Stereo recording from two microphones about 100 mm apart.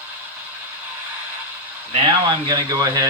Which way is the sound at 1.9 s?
45° right (ahead or behind).